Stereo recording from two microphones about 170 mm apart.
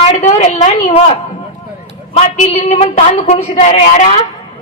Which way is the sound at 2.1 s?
35° left (ahead or behind).